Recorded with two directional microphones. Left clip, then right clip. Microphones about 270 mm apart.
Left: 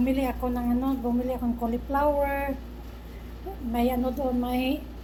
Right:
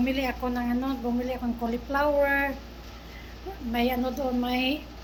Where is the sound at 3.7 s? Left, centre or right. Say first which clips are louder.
Even; centre.